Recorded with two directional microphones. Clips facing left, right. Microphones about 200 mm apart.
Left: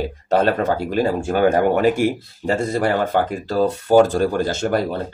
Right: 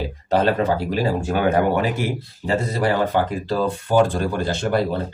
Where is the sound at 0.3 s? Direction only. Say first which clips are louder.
Left 1 dB; 50° left (ahead or behind).